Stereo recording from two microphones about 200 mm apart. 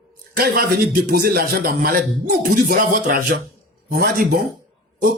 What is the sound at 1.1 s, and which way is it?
Speech, 45° right (ahead or behind).